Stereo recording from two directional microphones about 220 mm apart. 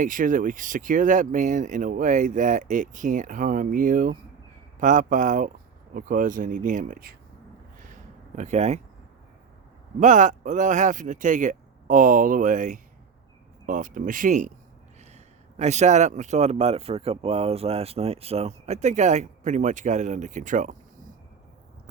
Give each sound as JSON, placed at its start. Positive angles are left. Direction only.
{"t": 0.0, "sound": "speech", "side_deg": -35}
{"t": 7.8, "sound": "a sound", "side_deg": -35}
{"t": 10.0, "sound": "speech", "side_deg": -35}